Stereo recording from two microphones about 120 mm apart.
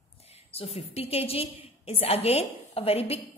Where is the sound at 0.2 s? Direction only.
60° left (ahead or behind).